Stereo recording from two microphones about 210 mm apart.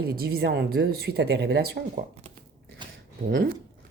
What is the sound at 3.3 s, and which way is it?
Speech, 60° right (ahead or behind).